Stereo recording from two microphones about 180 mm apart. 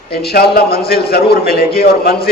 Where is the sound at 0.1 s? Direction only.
60° left (ahead or behind).